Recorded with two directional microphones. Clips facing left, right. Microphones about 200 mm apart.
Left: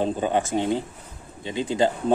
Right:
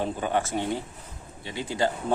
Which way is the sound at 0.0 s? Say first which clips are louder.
Left 4 dB; 20° left (ahead or behind).